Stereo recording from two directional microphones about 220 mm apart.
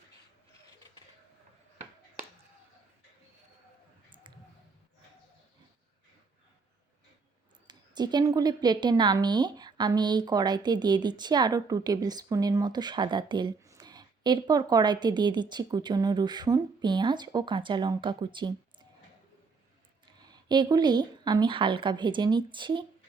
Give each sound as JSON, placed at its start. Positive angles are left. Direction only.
{"t": 7.7, "sound": "a woman's voice", "side_deg": -20}
{"t": 20.2, "sound": "a woman's voice", "side_deg": -20}